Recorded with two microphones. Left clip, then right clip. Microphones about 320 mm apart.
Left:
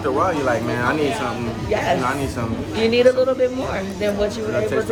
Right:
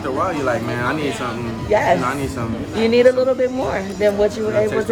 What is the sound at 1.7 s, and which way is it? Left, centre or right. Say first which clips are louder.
A woman's voice: right 4 dB; right.